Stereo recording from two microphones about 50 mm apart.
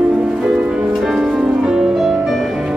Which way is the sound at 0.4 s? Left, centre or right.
Centre.